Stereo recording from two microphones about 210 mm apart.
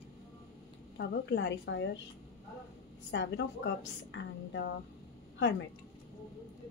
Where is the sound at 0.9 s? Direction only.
55° left (ahead or behind).